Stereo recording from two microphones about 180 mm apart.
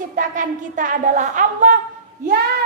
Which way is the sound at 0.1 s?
50° right (ahead or behind).